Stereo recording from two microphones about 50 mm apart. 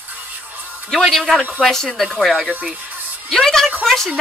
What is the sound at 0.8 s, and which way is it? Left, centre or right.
A woman's voice, centre.